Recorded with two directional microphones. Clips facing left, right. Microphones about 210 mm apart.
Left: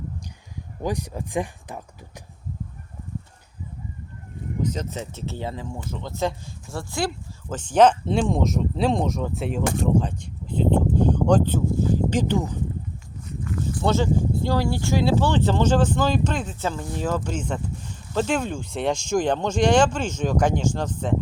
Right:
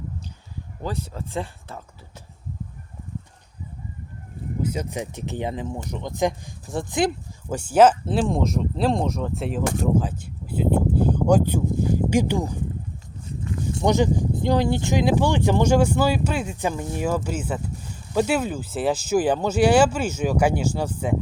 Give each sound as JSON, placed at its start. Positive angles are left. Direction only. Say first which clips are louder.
{"t": 0.8, "sound": "speech", "louder": "left 3 dB", "side_deg": 15}
{"t": 4.6, "sound": "speech", "louder": "right 1 dB", "side_deg": -10}
{"t": 13.2, "sound": "speech", "louder": "even", "side_deg": -25}